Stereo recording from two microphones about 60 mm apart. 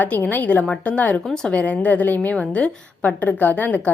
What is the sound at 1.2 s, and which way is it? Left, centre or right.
Speech, centre.